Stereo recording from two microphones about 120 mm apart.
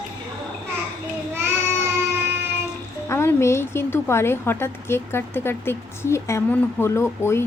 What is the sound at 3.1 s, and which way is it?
A woman's voice, 20° left (ahead or behind).